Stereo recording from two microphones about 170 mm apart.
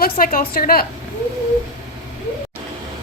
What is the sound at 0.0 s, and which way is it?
Speech, 55° left (ahead or behind).